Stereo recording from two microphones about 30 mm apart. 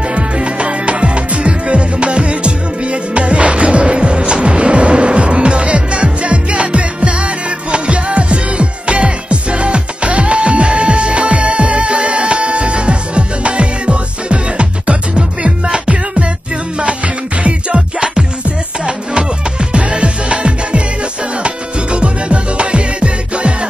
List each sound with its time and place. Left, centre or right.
0.1 s music: right
17.4 s music: right
17.7 s music: right
19.7 s music: right
21.9 s music: right